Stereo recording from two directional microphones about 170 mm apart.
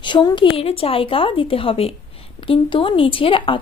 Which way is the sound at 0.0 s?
25° left (ahead or behind).